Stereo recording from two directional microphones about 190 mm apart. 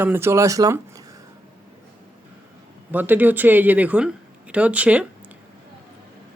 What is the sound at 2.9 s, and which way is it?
Speech, 10° right (ahead or behind).